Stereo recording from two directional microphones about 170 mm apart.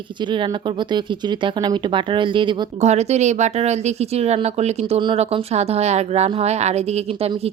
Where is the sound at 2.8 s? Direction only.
40° right (ahead or behind).